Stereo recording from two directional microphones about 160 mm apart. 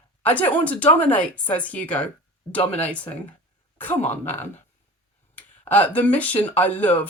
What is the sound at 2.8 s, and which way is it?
Speech, 10° left (ahead or behind).